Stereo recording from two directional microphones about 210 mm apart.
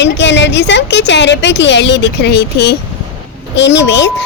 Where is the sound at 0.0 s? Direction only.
55° left (ahead or behind).